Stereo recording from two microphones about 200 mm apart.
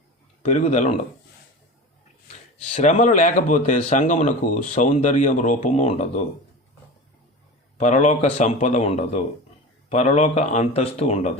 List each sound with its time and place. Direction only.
0.4 s speech: 35° left (ahead or behind)
2.7 s speech: 35° left (ahead or behind)
7.8 s speech: 35° left (ahead or behind)